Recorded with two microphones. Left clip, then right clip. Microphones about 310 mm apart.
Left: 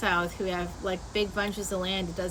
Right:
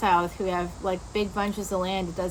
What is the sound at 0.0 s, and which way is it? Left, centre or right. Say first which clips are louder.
A woman's voice: right 4 dB; centre.